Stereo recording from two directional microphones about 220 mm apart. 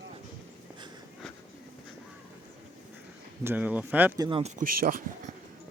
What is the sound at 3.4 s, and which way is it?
Speech, 5° right (ahead or behind).